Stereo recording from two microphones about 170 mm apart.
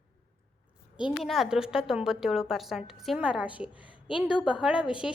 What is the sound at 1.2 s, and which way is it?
A woman's voice, centre (ahead or behind).